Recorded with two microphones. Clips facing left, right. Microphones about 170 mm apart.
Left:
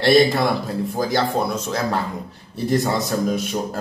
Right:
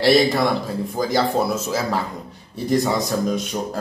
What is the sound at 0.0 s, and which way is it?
Speech, centre (ahead or behind).